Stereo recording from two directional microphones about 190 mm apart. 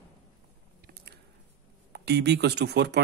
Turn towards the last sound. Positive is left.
turn(degrees=-60)  # may be behind; listen again after turning